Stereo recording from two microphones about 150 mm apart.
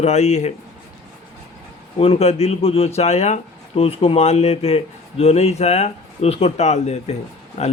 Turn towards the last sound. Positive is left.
turn(degrees=45)  # may be behind; listen again after turning